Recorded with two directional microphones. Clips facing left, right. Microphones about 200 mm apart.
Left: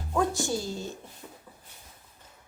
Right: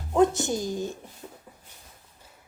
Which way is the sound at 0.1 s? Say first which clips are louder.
Right 6 dB; 20° right (ahead or behind).